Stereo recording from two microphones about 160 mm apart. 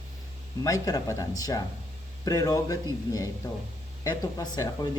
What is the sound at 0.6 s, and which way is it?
Speech, 20° left (ahead or behind).